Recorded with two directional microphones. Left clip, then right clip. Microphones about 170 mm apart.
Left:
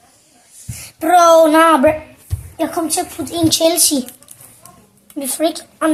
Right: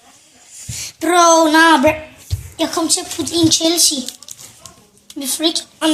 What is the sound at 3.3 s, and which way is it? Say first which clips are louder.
Speech: even; 70° left (ahead or behind).